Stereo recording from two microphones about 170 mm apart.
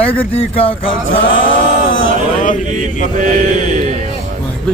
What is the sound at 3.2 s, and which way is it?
Mantra, 50° right (ahead or behind).